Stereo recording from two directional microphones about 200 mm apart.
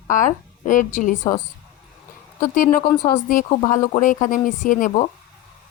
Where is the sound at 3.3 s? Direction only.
40° left (ahead or behind).